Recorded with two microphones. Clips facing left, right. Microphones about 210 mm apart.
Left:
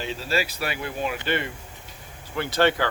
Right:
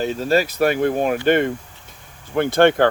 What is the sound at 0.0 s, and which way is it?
Speech, 45° right (ahead or behind).